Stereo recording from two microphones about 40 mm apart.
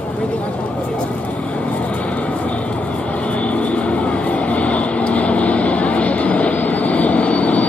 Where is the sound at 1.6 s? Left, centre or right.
Left.